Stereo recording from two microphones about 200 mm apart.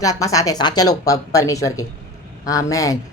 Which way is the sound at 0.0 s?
15° left (ahead or behind).